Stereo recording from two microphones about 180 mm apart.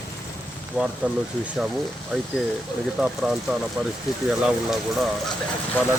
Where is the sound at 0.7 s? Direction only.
5° right (ahead or behind).